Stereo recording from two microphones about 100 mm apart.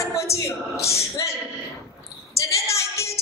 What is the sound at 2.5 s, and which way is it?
Female singing, 30° left (ahead or behind).